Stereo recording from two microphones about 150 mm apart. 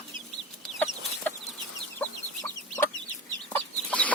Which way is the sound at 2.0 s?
15° left (ahead or behind).